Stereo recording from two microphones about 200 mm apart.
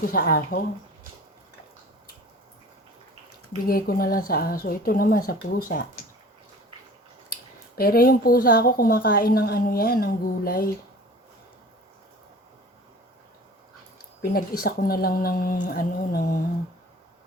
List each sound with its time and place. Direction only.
0.0 s a woman's voice: 45° left (ahead or behind)
3.7 s a woman's voice: 45° left (ahead or behind)
7.8 s a woman's voice: 50° left (ahead or behind)
14.2 s a woman's voice: 45° left (ahead or behind)